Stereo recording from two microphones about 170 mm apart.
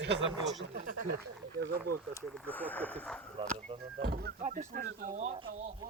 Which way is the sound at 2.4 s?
10° left (ahead or behind).